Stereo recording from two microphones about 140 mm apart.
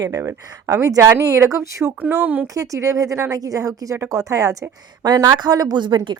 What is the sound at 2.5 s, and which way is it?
A woman's voice, 25° right (ahead or behind).